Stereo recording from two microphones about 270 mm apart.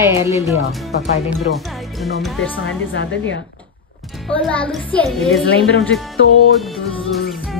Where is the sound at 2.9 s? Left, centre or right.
Left.